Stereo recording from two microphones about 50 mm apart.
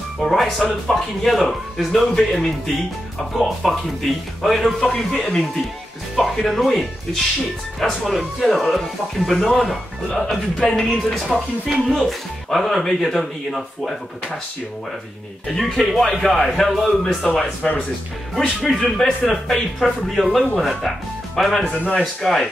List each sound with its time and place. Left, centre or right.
0.2 s speech: centre
10.9 s speech: centre
11.9 s speech: centre
15.4 s speech: centre
17.2 s speech: left
18.8 s speech: centre
21.7 s speech: left
22.2 s speech: centre